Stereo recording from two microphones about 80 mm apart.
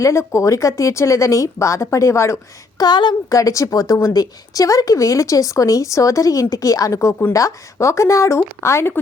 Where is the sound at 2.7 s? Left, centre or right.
Left.